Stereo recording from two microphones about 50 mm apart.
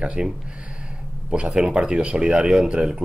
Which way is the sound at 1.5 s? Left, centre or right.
Centre.